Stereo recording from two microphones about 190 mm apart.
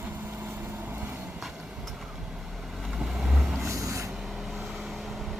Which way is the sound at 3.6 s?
15° right (ahead or behind).